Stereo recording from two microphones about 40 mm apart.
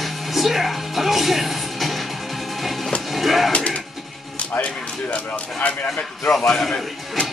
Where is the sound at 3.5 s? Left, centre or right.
Left.